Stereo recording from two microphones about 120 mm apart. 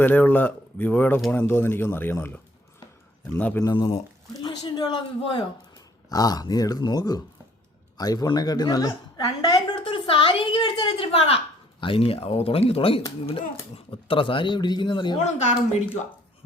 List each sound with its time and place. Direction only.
0.0 s speech: 15° left (ahead or behind)
3.6 s a woman's voice: 30° left (ahead or behind)
9.7 s a woman's voice: 50° left (ahead or behind)
15.2 s speech: 75° left (ahead or behind)